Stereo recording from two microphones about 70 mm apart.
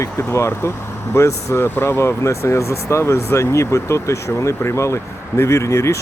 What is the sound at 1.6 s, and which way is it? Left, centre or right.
Speech, left.